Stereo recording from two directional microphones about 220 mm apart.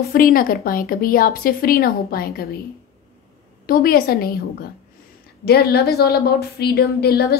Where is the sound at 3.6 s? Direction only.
40° left (ahead or behind).